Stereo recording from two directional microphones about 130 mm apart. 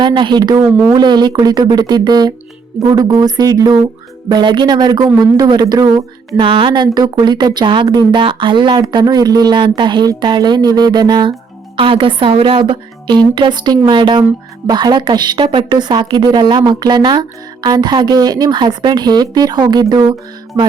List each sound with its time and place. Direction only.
0.0 s a woman's voice: 40° right (ahead or behind)
6.3 s a woman's voice: 40° right (ahead or behind)
20.5 s music: 15° right (ahead or behind)